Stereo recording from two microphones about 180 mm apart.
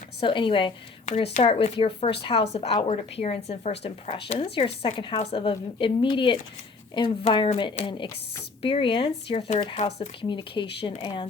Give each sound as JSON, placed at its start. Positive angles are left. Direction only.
{"t": 0.2, "sound": "a woman's voice", "side_deg": 30}